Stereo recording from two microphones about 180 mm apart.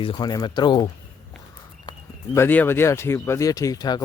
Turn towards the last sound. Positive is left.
turn(degrees=20)  # may be behind; listen again after turning